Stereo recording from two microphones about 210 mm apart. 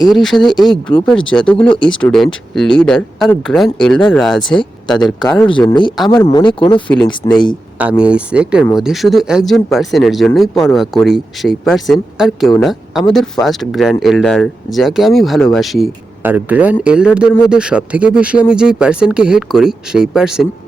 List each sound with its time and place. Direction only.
0.0 s speech: centre (ahead or behind)
1.5 s speech: 25° left (ahead or behind)
2.0 s speech: 5° left (ahead or behind)
4.4 s speech: 20° left (ahead or behind)
7.8 s speech: 5° right (ahead or behind)